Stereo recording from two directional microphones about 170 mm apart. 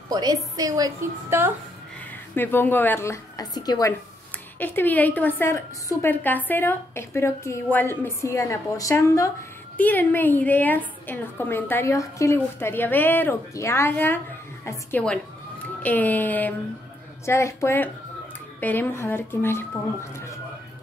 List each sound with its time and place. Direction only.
0.1 s a woman's voice: 25° right (ahead or behind)
2.3 s a woman's voice: 10° left (ahead or behind)
4.6 s a woman's voice: 10° left (ahead or behind)